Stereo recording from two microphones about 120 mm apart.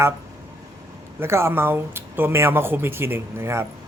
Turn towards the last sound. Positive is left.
turn(degrees=-20)  # may be behind; listen again after turning